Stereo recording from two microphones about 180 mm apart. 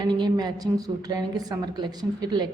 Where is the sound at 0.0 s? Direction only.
25° right (ahead or behind).